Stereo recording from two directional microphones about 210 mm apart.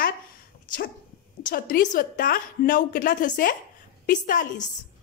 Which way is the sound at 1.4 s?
40° left (ahead or behind).